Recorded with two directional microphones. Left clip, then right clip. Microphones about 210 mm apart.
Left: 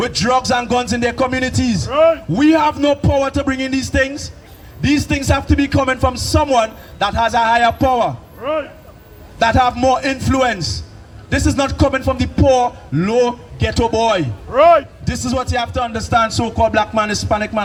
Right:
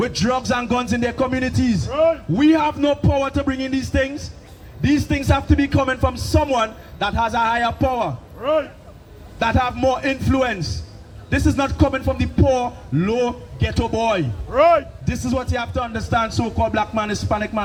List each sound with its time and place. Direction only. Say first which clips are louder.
0.0 s music: left 5 dB; 40° left (ahead or behind)
8.4 s speech: right 1 dB; 50° right (ahead or behind)
9.4 s music: left 6 dB; 40° left (ahead or behind)
14.5 s a man's voice: left 4 dB; 5° left (ahead or behind)
15.1 s music: left 4 dB; 40° left (ahead or behind)